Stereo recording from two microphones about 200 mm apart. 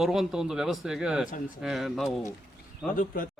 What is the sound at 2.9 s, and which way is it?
Speech, 45° left (ahead or behind).